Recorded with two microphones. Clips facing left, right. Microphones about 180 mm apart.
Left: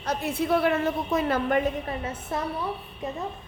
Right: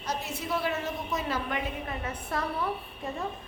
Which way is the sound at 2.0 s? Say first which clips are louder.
Left 3 dB; 25° left (ahead or behind).